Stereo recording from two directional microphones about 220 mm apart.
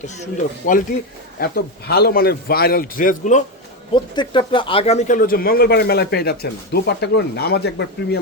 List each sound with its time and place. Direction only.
0.6 s speech: 40° left (ahead or behind)
3.9 s speech: 20° left (ahead or behind); by 8.2 s 45° left (ahead or behind)